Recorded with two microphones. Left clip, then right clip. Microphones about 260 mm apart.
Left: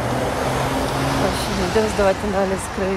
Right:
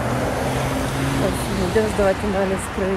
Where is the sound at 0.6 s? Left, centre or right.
Left.